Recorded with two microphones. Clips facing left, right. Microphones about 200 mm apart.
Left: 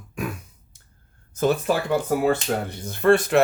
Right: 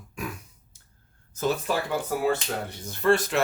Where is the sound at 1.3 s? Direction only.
55° left (ahead or behind).